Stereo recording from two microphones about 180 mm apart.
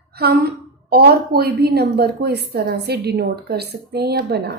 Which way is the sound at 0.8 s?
60° right (ahead or behind).